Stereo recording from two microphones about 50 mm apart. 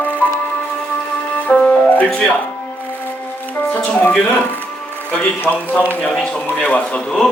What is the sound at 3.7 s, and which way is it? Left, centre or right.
Speech, left.